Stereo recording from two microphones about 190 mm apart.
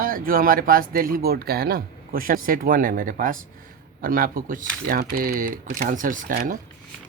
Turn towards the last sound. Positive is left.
turn(degrees=-45)  # may be behind; listen again after turning